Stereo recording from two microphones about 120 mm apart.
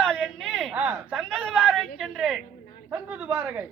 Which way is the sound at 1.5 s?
10° right (ahead or behind).